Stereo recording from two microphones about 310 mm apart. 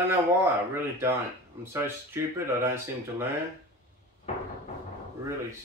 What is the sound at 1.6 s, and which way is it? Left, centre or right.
Speech, centre.